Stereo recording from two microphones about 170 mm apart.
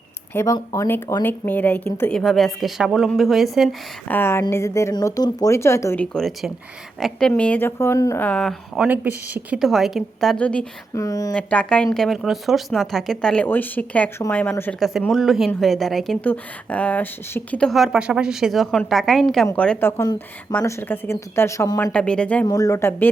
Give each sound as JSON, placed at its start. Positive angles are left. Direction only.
{"t": 0.3, "sound": "a woman's voice", "side_deg": 20}
{"t": 4.1, "sound": "a woman's voice", "side_deg": 15}
{"t": 6.1, "sound": "a woman's voice", "side_deg": 0}
{"t": 8.9, "sound": "a woman's voice", "side_deg": -10}
{"t": 10.9, "sound": "speech", "side_deg": 20}
{"t": 11.3, "sound": "a woman's voice", "side_deg": 5}
{"t": 14.8, "sound": "a woman's voice", "side_deg": 0}
{"t": 21.9, "sound": "a woman's voice", "side_deg": 5}
{"t": 22.4, "sound": "speech", "side_deg": 20}